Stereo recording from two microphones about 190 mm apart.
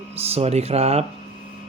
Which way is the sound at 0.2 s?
35° right (ahead or behind).